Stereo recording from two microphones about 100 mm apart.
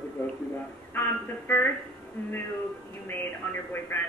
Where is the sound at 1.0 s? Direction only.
20° left (ahead or behind).